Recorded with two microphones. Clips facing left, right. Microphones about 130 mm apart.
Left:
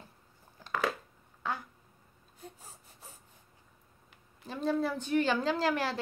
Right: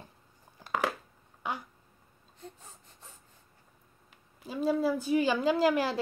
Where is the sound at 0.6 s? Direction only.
15° right (ahead or behind).